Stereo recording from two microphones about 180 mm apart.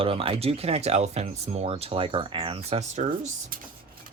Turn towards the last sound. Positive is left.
turn(degrees=-40)  # may be behind; listen again after turning